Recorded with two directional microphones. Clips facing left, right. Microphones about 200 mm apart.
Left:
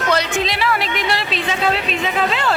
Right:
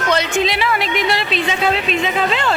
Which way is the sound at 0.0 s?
Centre (ahead or behind).